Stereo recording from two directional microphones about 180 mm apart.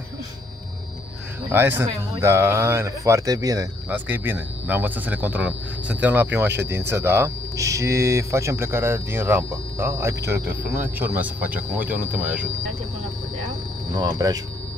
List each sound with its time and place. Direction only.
1.5 s speech: 10° right (ahead or behind)
13.9 s speech: 20° right (ahead or behind)